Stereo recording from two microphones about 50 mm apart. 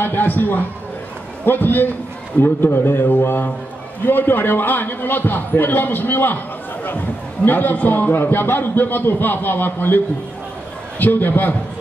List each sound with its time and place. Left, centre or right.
0.0 s a man's voice: left
7.4 s a man's voice: left